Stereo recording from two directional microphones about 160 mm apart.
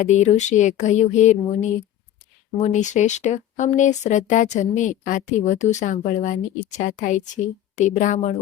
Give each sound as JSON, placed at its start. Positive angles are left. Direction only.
{"t": 0.0, "sound": "a woman's voice", "side_deg": 50}